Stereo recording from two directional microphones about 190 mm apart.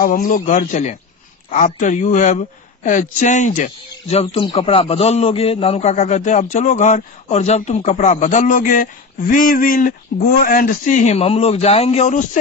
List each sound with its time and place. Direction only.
0.0 s speech: 45° left (ahead or behind)